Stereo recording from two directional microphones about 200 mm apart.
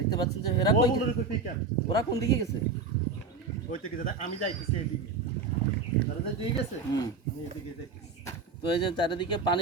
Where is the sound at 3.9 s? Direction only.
45° left (ahead or behind).